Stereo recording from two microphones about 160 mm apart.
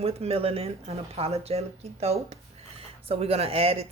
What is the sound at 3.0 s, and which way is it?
Speech, 40° right (ahead or behind).